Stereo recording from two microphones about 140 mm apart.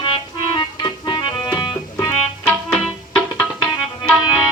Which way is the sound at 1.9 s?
15° left (ahead or behind).